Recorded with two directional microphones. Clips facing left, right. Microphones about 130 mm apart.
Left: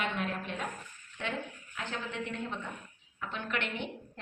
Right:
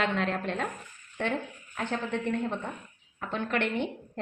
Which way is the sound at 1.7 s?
55° right (ahead or behind).